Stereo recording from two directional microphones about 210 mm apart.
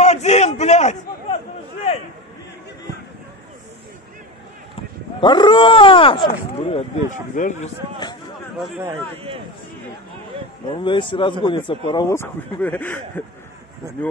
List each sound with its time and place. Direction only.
0.0 s a sound: 30° left (ahead or behind)
5.2 s speech: 20° left (ahead or behind)
7.1 s speech: 35° left (ahead or behind)
9.1 s speech: 25° right (ahead or behind)
10.7 s speech: 25° left (ahead or behind)